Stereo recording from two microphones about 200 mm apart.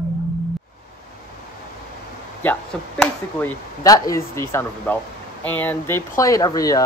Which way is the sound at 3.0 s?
10° left (ahead or behind).